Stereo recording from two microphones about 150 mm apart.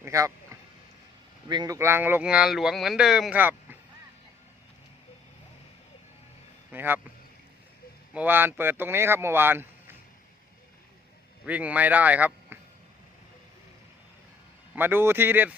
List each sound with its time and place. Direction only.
0.0 s speech: 20° right (ahead or behind); by 3.4 s centre (ahead or behind)
6.7 s speech: 15° right (ahead or behind)
8.1 s speech: 10° right (ahead or behind)
11.4 s speech: 10° right (ahead or behind)
14.8 s speech: 15° right (ahead or behind)